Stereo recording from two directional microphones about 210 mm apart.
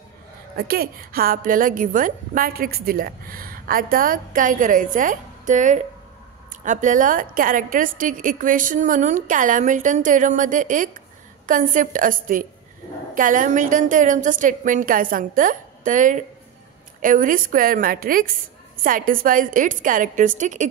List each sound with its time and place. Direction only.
0.6 s a woman's voice: 45° right (ahead or behind)